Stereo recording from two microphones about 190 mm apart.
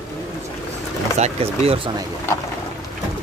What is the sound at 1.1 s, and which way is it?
Speech, 35° right (ahead or behind).